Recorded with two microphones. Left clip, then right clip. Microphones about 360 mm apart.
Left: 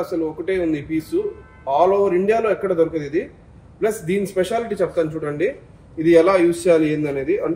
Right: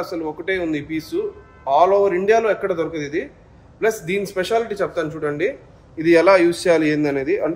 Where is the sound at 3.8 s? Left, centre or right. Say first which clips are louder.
Right 1 dB; centre.